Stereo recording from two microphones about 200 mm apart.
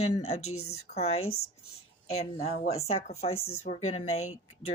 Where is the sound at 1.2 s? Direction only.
90° left.